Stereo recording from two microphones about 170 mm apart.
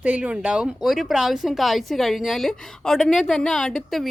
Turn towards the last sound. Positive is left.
turn(degrees=0)  # may be behind; listen again after turning